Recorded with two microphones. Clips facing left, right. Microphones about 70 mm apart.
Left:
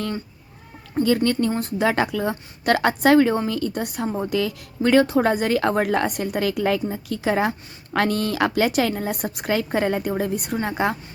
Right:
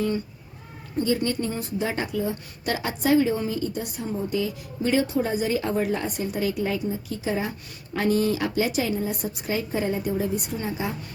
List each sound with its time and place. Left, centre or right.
1.0 s a woman's voice: left
1.5 s a woman's voice: left
4.2 s a woman's voice: left
4.8 s a woman's voice: left